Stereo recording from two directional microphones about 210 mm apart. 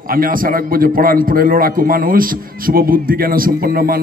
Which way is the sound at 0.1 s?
40° right (ahead or behind).